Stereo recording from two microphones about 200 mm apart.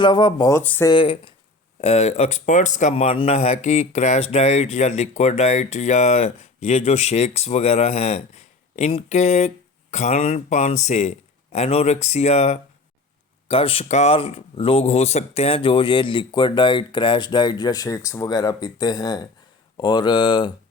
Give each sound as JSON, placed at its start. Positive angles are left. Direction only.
{"t": 0.0, "sound": "speech", "side_deg": 20}
{"t": 0.6, "sound": "speech", "side_deg": 10}
{"t": 0.9, "sound": "speech", "side_deg": 25}